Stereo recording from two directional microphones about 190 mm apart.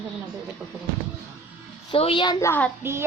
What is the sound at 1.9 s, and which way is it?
Speech, 25° left (ahead or behind).